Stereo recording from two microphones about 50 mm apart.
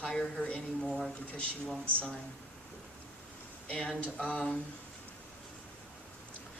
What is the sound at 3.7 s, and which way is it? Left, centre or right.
Speech, left.